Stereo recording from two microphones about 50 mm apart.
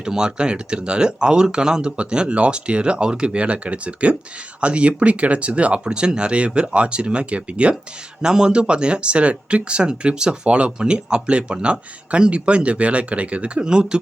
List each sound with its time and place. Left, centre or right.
0.0 s speech: centre